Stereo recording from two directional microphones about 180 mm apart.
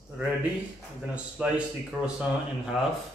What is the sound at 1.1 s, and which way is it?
Speech, 5° right (ahead or behind).